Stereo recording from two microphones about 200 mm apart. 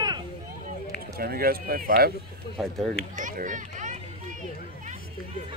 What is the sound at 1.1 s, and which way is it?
Speech, 50° right (ahead or behind).